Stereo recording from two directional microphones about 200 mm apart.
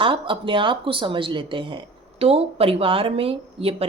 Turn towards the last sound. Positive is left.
turn(degrees=-30)  # may be behind; listen again after turning